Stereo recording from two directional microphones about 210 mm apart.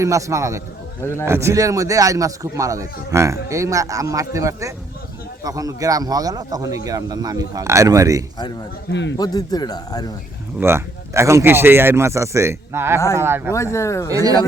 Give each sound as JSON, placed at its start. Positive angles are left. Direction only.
{"t": 0.0, "sound": "speech", "side_deg": -15}
{"t": 8.9, "sound": "a man's voice", "side_deg": 60}
{"t": 9.1, "sound": "speech", "side_deg": 20}
{"t": 10.6, "sound": "speech", "side_deg": -10}
{"t": 13.5, "sound": "speech", "side_deg": 15}
{"t": 14.1, "sound": "speech", "side_deg": -15}